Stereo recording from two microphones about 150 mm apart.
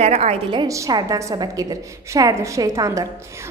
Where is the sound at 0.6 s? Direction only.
20° right (ahead or behind).